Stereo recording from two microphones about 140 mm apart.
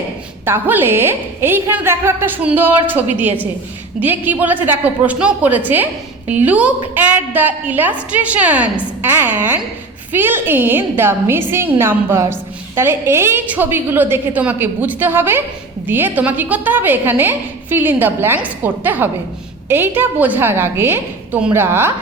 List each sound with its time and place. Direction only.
0.4 s a woman's voice: 15° right (ahead or behind)